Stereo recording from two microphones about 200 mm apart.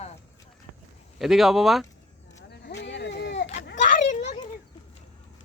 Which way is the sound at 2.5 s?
55° left (ahead or behind).